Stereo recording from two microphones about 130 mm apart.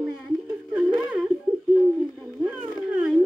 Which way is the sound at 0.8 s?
10° right (ahead or behind).